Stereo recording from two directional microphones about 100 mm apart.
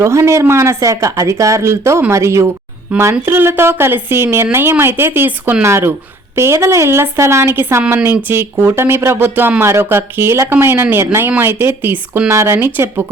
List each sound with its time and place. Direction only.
0.0 s speech: 30° right (ahead or behind)